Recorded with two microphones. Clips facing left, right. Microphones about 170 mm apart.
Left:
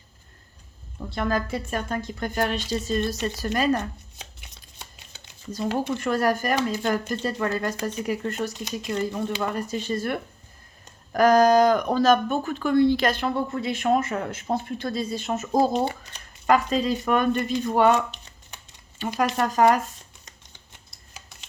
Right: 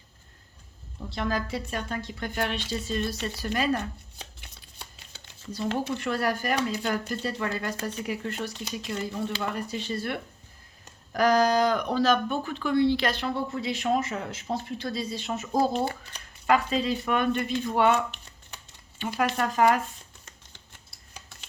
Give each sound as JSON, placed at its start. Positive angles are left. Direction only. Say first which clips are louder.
{"t": 1.1, "sound": "speech", "louder": "left 3 dB", "side_deg": 50}
{"t": 4.8, "sound": "a sound", "louder": "left 1 dB", "side_deg": 20}
{"t": 5.7, "sound": "speech", "louder": "left 5 dB", "side_deg": 45}
{"t": 16.5, "sound": "speech", "louder": "left 3 dB", "side_deg": 40}